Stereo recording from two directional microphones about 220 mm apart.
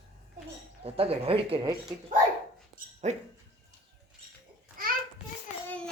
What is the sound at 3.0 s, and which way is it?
Speech, 30° right (ahead or behind).